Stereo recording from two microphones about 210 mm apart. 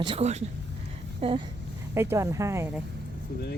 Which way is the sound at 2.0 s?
15° right (ahead or behind).